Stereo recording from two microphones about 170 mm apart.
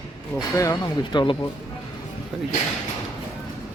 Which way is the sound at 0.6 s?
25° left (ahead or behind).